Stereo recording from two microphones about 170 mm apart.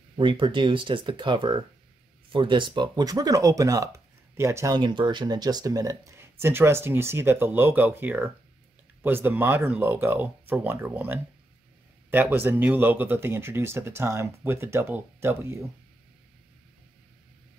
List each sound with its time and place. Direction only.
0.2 s speech: 30° right (ahead or behind)